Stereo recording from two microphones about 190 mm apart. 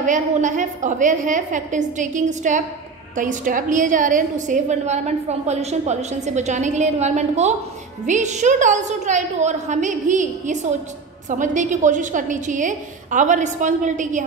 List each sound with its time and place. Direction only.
0.0 s a woman's voice: 40° right (ahead or behind)